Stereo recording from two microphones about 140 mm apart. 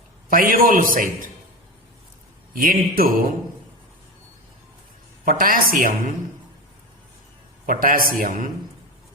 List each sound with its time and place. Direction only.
0.3 s a man's voice: 90° right; by 1.3 s 70° right (ahead or behind)
2.5 s speech: 90° right
5.2 s a man's voice: 85° right
7.7 s a man's voice: 90° right